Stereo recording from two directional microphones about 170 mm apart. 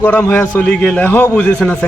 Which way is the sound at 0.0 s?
10° left (ahead or behind).